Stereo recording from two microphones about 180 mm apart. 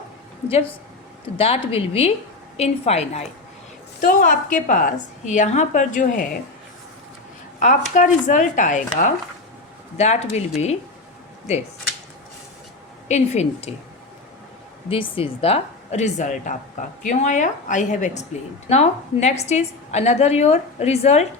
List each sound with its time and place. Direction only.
1.4 s a woman's voice: 35° left (ahead or behind)
4.0 s a woman's voice: 50° left (ahead or behind)
7.6 s a woman's voice: 45° left (ahead or behind)
13.1 s a woman's voice: 40° left (ahead or behind)
14.8 s a woman's voice: 30° left (ahead or behind)